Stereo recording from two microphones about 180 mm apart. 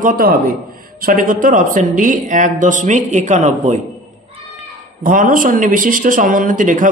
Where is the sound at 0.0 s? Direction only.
55° right (ahead or behind).